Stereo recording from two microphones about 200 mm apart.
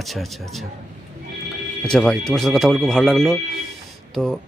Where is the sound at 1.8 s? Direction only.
Centre (ahead or behind).